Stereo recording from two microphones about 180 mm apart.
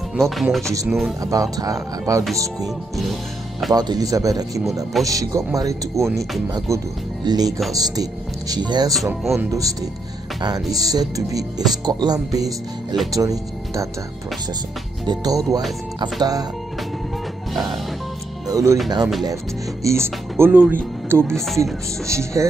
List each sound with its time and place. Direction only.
0.1 s speech: centre (ahead or behind)
1.2 s speech: 20° right (ahead or behind)
3.7 s speech: 20° right (ahead or behind)
15.0 s speech: 20° right (ahead or behind)
18.5 s music: 15° right (ahead or behind)
19.8 s speech: 15° right (ahead or behind)